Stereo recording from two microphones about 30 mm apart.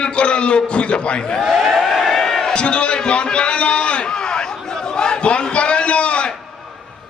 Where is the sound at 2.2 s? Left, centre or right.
Centre.